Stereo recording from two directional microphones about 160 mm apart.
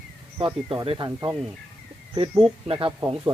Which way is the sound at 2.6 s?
35° right (ahead or behind).